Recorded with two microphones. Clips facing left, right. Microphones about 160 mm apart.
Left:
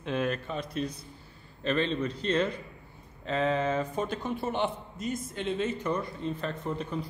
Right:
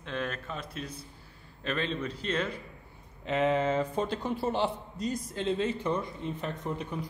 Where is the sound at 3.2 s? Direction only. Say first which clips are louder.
Right 1 dB; 20° right (ahead or behind).